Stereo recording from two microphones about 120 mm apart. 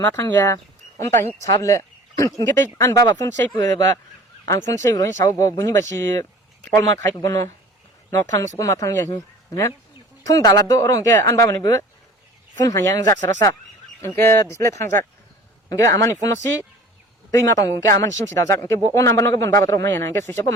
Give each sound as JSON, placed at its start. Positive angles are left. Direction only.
{"t": 0.0, "sound": "speech", "side_deg": 20}
{"t": 10.2, "sound": "speech", "side_deg": 30}
{"t": 17.3, "sound": "speech", "side_deg": 25}